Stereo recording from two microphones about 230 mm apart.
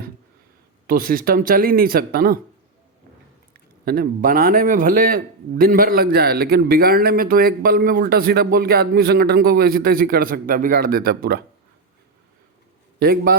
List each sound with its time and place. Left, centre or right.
0.9 s a man's voice: right
3.5 s a man's voice: right
13.0 s a man's voice: right